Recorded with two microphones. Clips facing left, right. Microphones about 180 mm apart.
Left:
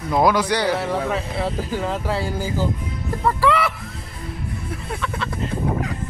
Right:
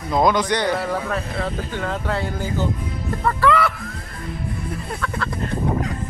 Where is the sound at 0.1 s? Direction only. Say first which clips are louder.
Even; 10° left (ahead or behind).